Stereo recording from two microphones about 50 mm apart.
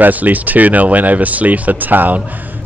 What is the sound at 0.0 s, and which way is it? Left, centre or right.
Speech, right.